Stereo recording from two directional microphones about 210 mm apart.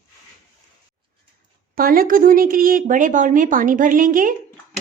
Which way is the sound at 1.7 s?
45° right (ahead or behind).